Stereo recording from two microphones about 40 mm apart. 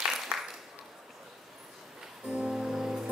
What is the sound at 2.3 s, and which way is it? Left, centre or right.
Music, right.